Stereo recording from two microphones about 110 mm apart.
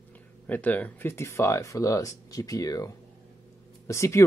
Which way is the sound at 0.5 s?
15° left (ahead or behind).